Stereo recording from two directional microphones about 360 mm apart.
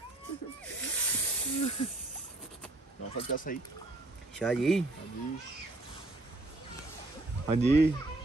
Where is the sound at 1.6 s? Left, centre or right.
Centre.